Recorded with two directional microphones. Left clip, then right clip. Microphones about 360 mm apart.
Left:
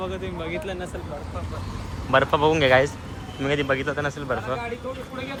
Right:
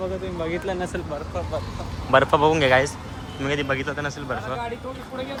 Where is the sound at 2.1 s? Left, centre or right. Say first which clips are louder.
Right 2 dB; centre.